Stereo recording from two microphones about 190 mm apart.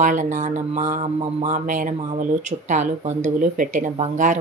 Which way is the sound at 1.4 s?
40° right (ahead or behind).